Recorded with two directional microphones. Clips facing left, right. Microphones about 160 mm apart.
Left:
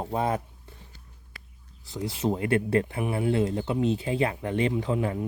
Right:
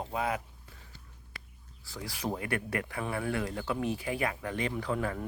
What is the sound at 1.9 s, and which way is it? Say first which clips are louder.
Speech: left 8 dB; 25° left (ahead or behind).